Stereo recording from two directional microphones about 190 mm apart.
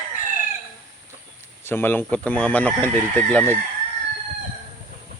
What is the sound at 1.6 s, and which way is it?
Speech, 10° left (ahead or behind).